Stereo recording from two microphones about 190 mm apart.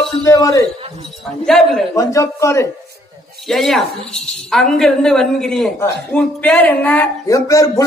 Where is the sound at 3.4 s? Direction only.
Centre (ahead or behind).